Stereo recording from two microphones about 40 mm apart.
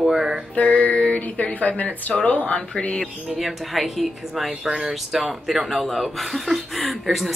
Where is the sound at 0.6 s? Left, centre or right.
Left.